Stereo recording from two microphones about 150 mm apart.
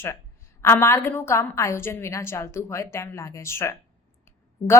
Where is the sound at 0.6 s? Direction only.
15° left (ahead or behind).